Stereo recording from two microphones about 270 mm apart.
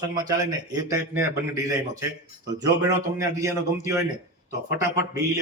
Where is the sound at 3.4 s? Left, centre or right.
Centre.